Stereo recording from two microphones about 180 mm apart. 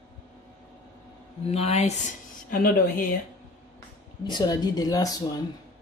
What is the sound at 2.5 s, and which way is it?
Speech, 55° left (ahead or behind).